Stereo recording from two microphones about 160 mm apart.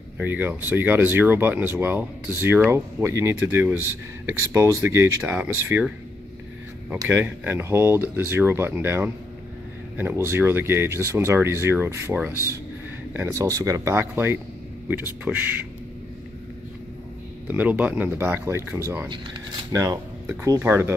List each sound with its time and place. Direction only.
0.2 s speech: 10° right (ahead or behind)
7.1 s speech: 10° right (ahead or behind)
17.5 s speech: 10° right (ahead or behind)